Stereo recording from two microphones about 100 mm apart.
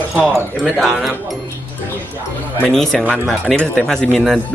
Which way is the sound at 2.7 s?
5° left (ahead or behind).